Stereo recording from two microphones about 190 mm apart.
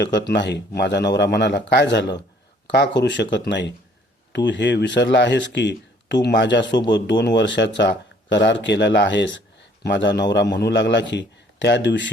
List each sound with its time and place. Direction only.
0.0 s speech: 65° left (ahead or behind)